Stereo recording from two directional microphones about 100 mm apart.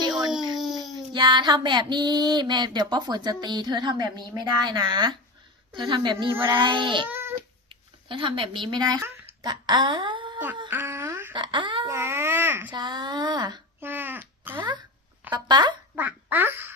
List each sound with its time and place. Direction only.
0.5 s a sound: 5° right (ahead or behind)
0.9 s child singing: 50° right (ahead or behind)
5.7 s a woman's voice: 55° right (ahead or behind)
6.4 s child singing: 50° right (ahead or behind)
7.1 s cat: 20° right (ahead or behind)
7.7 s speech: 60° right (ahead or behind); by 9.0 s 40° right (ahead or behind)
9.4 s a sound: 45° right (ahead or behind)
10.3 s a sound: 20° right (ahead or behind)
11.3 s child singing: 50° right (ahead or behind)
11.9 s babbling: 25° right (ahead or behind)
12.7 s child singing: 45° right (ahead or behind)
13.8 s a sound: 20° right (ahead or behind)
15.3 s child singing: 45° right (ahead or behind)
16.0 s a child's voice: 20° right (ahead or behind)